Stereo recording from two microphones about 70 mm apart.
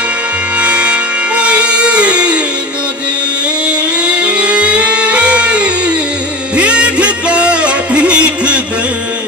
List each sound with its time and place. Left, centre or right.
0.6 s music: centre
3.6 s music: centre